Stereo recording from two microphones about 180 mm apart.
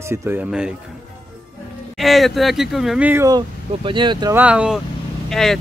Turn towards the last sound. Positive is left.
turn(degrees=5)  # may be behind; listen again after turning